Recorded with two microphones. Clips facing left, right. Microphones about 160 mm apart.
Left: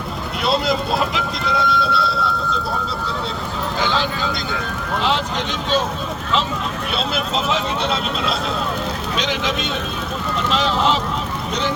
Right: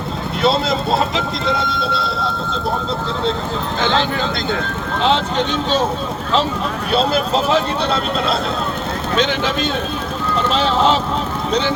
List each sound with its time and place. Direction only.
0.4 s speech: 25° right (ahead or behind)
7.0 s speech: 35° right (ahead or behind)